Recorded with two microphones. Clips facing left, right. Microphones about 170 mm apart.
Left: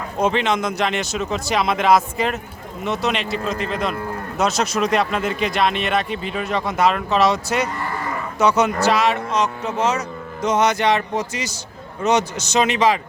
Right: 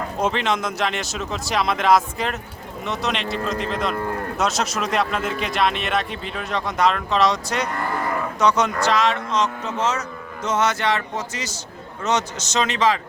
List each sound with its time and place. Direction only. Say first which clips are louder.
0.2 s speech: left 3 dB; centre (ahead or behind)